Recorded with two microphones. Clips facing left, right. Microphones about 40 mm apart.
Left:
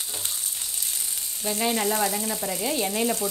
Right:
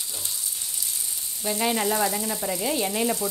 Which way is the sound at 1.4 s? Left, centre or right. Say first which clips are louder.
Right 1 dB; centre.